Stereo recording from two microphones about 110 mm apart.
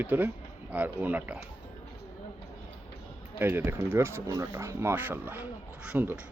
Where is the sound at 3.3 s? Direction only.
20° right (ahead or behind).